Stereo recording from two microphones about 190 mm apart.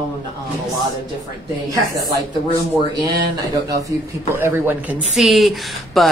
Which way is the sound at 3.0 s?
20° right (ahead or behind).